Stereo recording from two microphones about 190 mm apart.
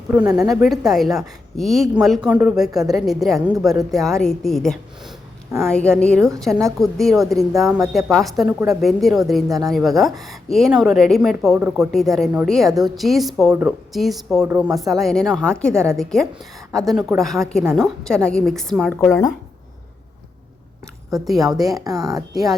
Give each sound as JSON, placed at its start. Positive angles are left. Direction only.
{"t": 0.1, "sound": "a woman's voice", "side_deg": -10}
{"t": 15.7, "sound": "a woman's voice", "side_deg": -15}
{"t": 16.7, "sound": "a woman's voice", "side_deg": 0}
{"t": 18.9, "sound": "speech", "side_deg": 15}
{"t": 21.1, "sound": "a woman's voice", "side_deg": 0}
{"t": 21.4, "sound": "a woman's voice", "side_deg": -20}